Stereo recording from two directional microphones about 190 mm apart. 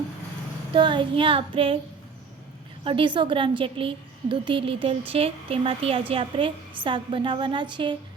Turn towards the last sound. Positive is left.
turn(degrees=-25)  # may be behind; listen again after turning